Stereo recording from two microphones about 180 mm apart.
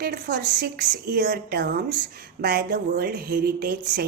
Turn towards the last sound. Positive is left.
turn(degrees=-60)  # may be behind; listen again after turning